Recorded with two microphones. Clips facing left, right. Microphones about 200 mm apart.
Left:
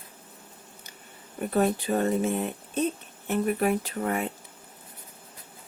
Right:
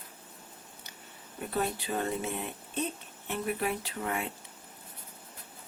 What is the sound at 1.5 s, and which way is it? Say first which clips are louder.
Speech: left 8 dB; 50° left (ahead or behind).